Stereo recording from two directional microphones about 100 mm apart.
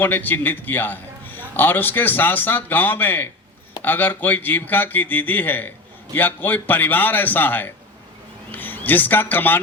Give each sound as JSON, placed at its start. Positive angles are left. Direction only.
{"t": 0.0, "sound": "a man's voice", "side_deg": 20}